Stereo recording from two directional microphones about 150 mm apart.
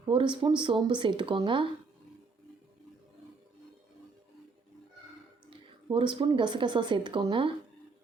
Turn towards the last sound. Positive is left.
turn(degrees=-35)  # may be behind; listen again after turning